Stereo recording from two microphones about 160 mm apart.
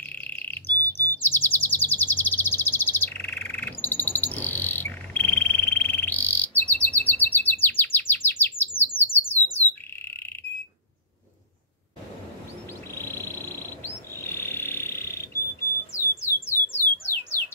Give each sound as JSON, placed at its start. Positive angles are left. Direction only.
{"t": 0.1, "sound": "chirp", "side_deg": 10}
{"t": 9.3, "sound": "squawk", "side_deg": 10}
{"t": 12.9, "sound": "frog", "side_deg": 15}
{"t": 15.9, "sound": "alarm", "side_deg": 20}